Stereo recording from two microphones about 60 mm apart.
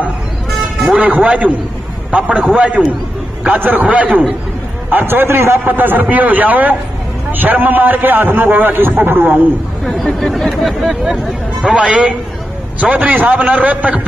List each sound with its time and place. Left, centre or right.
0.9 s a man's voice: right
5.7 s a man's voice: right
9.8 s speech: centre
11.6 s a man's voice: centre